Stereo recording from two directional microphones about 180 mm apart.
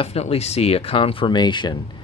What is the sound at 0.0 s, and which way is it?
Speech, 35° left (ahead or behind).